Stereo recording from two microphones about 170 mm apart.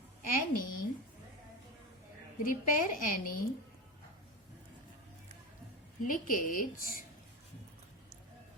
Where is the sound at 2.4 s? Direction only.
50° left (ahead or behind).